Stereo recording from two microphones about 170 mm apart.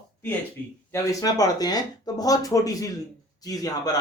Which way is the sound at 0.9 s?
20° left (ahead or behind).